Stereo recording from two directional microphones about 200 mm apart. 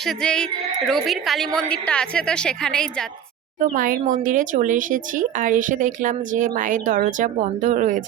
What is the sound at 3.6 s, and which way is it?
Speech, 45° right (ahead or behind).